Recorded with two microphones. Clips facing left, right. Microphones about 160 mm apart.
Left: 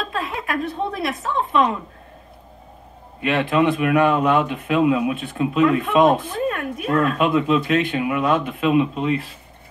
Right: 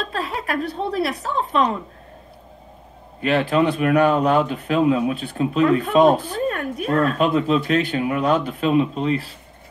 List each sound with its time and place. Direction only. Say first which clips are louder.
0.1 s speech: even; 35° right (ahead or behind)
3.2 s a man's voice: right 1 dB; 35° right (ahead or behind)